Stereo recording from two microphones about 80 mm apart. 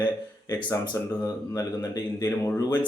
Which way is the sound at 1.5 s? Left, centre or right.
Left.